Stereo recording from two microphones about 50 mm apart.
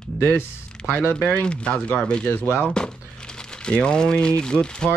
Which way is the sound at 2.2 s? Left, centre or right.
Left.